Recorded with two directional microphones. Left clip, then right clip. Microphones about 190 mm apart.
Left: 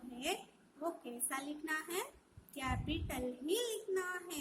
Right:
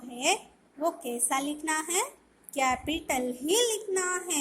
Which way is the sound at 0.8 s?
15° right (ahead or behind).